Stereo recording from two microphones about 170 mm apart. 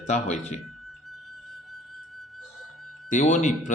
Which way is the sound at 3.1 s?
45° left (ahead or behind).